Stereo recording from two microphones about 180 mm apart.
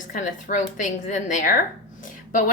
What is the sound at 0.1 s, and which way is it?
A woman's voice, 45° left (ahead or behind).